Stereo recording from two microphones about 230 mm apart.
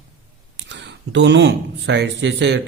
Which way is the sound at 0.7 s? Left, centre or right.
Right.